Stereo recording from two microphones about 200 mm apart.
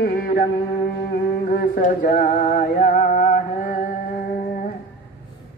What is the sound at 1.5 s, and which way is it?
Music, 45° left (ahead or behind).